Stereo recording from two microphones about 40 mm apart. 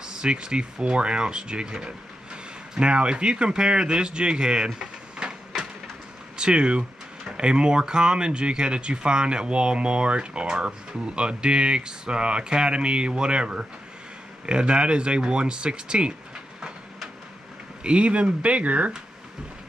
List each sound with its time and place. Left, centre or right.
0.0 s speech: right
6.3 s speech: right
17.8 s speech: right